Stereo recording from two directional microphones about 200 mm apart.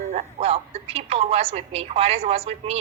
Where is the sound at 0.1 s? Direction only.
35° right (ahead or behind).